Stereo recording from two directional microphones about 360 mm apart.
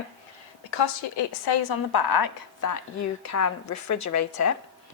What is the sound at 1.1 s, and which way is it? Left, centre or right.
A woman's voice, left.